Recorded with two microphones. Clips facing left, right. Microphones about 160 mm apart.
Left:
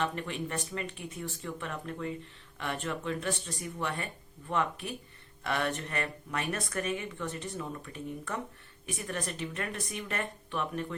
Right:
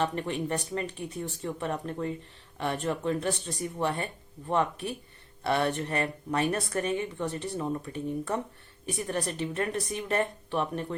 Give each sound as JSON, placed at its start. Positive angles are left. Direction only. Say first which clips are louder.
{"t": 0.0, "sound": "speech", "louder": "right 4 dB", "side_deg": -35}